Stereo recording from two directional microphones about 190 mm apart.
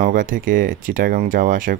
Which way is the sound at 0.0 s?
45° right (ahead or behind).